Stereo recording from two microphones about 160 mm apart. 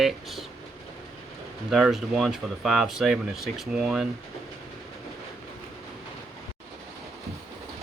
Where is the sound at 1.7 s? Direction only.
Centre (ahead or behind).